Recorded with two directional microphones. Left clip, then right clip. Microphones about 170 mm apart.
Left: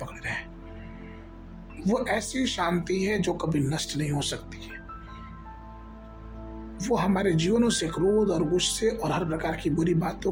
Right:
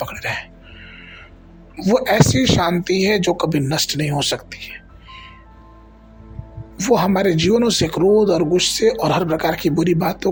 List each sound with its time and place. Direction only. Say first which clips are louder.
0.0 s music: right 9 dB; 40° right (ahead or behind)
1.8 s speech: right 11 dB; 40° right (ahead or behind)
6.7 s speech: right 10 dB; 40° right (ahead or behind)